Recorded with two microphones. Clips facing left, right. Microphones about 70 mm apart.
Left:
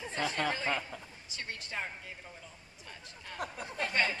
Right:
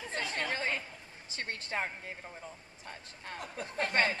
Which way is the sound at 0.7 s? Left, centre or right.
Left.